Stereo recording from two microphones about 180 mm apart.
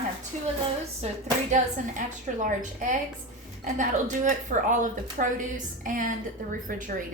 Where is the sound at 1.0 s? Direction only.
35° right (ahead or behind).